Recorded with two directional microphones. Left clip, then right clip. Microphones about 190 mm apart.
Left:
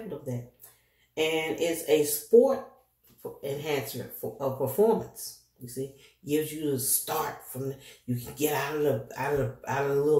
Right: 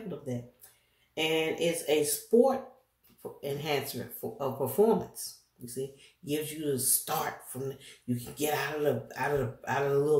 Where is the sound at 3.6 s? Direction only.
30° right (ahead or behind).